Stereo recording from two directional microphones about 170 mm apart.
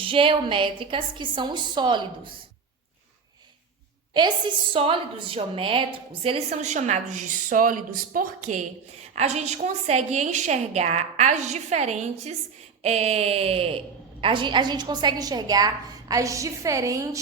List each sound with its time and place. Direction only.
0.0 s a woman's voice: 30° right (ahead or behind)
4.1 s a woman's voice: 25° right (ahead or behind)